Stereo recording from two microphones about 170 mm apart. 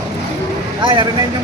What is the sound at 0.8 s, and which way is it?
Speech, 25° right (ahead or behind).